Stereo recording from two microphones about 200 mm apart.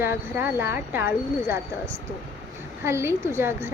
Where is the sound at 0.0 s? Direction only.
10° right (ahead or behind).